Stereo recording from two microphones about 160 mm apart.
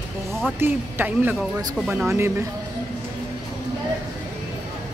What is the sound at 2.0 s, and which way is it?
Speech, 15° right (ahead or behind).